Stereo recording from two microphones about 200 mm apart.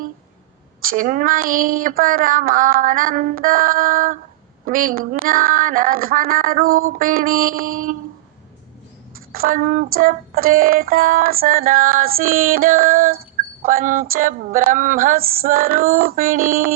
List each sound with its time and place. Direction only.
0.8 s child singing: 45° right (ahead or behind)
9.3 s child singing: 45° right (ahead or behind)